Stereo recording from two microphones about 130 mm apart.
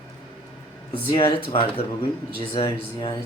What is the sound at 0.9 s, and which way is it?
Speech, 40° left (ahead or behind).